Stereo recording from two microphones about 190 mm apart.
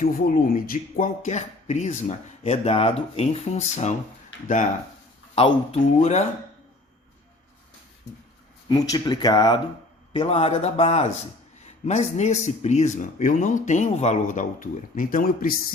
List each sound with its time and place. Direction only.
0.0 s speech: 45° left (ahead or behind)
5.3 s speech: 30° left (ahead or behind)
8.7 s speech: 20° left (ahead or behind); by 15.5 s 50° left (ahead or behind)